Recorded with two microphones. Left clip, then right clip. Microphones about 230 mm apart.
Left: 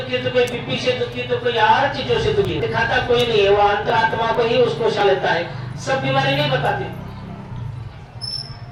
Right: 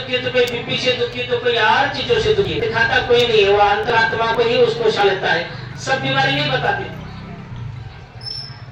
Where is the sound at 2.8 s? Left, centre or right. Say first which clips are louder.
Right 3 dB; right.